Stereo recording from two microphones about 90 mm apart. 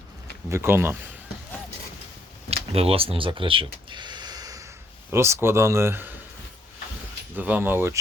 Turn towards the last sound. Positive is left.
turn(degrees=-25)  # may be behind; listen again after turning